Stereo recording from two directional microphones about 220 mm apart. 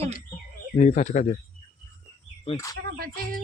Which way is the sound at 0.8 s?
35° left (ahead or behind).